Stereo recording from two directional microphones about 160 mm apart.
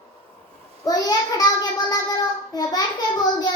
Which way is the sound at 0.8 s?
25° left (ahead or behind).